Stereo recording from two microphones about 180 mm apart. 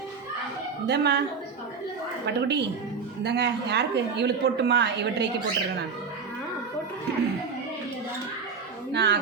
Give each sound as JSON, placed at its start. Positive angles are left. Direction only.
{"t": 0.9, "sound": "a woman's voice", "side_deg": -70}
{"t": 2.2, "sound": "a woman's voice", "side_deg": -70}
{"t": 8.9, "sound": "speech", "side_deg": -70}